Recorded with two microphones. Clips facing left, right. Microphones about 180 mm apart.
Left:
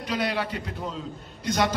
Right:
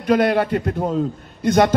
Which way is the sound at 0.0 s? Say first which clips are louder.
Right 11 dB; 55° right (ahead or behind).